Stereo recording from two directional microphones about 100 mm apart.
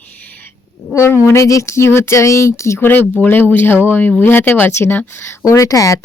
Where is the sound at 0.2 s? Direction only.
15° left (ahead or behind).